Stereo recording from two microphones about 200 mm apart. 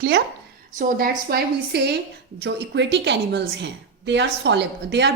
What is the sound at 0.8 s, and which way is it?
A woman's voice, 50° right (ahead or behind).